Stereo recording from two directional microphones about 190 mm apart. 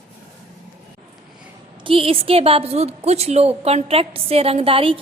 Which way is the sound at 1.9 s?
30° right (ahead or behind).